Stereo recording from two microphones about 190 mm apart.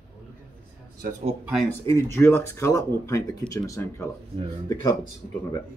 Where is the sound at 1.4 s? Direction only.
Centre (ahead or behind).